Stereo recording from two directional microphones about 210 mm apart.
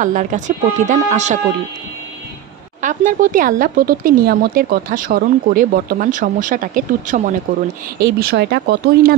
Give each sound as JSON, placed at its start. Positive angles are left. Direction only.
{"t": 0.0, "sound": "speech", "side_deg": -40}
{"t": 2.8, "sound": "speech", "side_deg": -35}